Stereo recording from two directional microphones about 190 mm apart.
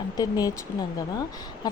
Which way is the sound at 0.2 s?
20° left (ahead or behind).